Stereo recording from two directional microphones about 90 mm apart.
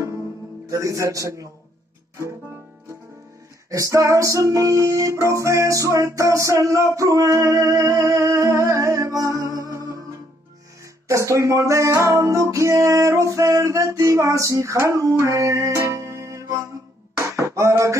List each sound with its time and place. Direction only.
0.7 s music: 35° right (ahead or behind)
3.7 s music: 35° right (ahead or behind)
11.1 s music: 35° right (ahead or behind)
17.2 s a sound: 35° right (ahead or behind)